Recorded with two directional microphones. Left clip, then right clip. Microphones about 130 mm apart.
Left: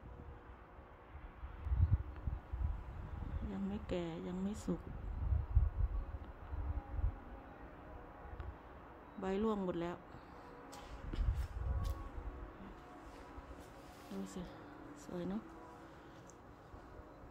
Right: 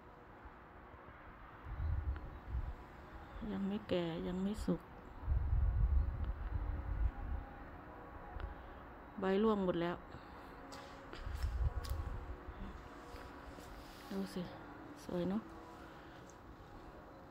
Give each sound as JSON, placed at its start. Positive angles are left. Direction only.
{"t": 3.4, "sound": "speech", "side_deg": -15}
{"t": 9.2, "sound": "speech", "side_deg": -15}
{"t": 14.2, "sound": "speech", "side_deg": -25}